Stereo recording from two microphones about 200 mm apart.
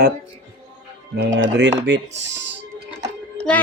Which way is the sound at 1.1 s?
70° right (ahead or behind).